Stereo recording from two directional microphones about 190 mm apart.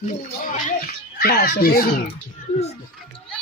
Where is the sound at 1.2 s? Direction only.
50° left (ahead or behind).